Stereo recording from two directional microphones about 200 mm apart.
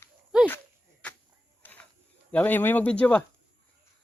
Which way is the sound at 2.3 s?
10° left (ahead or behind).